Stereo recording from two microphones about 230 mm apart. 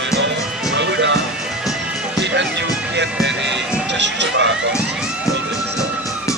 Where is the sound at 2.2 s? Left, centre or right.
Right.